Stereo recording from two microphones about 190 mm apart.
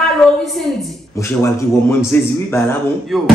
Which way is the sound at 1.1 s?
15° left (ahead or behind).